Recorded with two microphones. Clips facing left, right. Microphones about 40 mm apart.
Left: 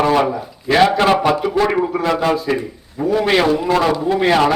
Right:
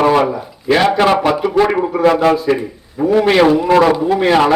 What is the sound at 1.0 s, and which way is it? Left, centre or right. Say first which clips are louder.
A man's voice: right 2 dB; centre.